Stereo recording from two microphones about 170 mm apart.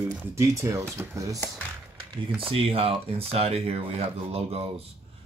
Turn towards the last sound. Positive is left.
turn(degrees=-35)  # may be behind; listen again after turning